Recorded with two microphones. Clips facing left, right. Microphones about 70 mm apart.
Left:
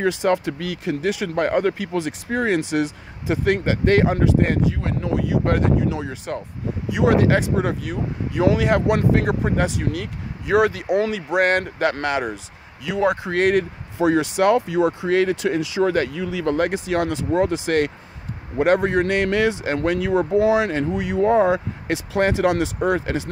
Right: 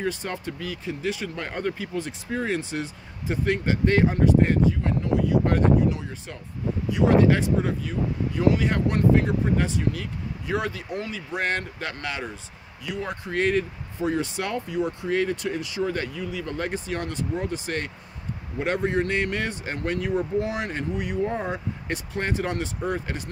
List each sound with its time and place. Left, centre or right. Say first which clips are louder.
0.0 s speech: left 10 dB; left
12.8 s speech: left 11 dB; left
18.6 s speech: left 7 dB; left